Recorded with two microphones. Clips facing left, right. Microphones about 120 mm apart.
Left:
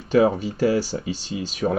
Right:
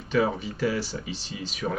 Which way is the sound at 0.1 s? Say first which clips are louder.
Left 7 dB; 35° left (ahead or behind).